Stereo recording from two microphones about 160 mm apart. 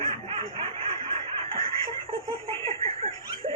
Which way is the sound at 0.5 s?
35° right (ahead or behind).